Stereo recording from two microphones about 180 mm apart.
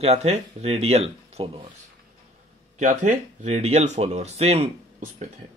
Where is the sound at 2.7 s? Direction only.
40° right (ahead or behind).